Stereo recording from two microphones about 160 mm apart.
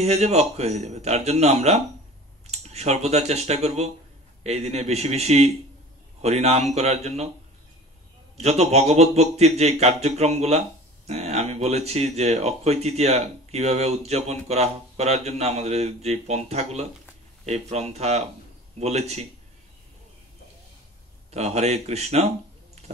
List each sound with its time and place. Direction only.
0.0 s speech: 40° right (ahead or behind)
8.4 s speech: 40° right (ahead or behind)
21.3 s speech: 45° right (ahead or behind)